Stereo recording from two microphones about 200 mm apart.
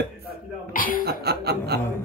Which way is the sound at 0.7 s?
45° left (ahead or behind).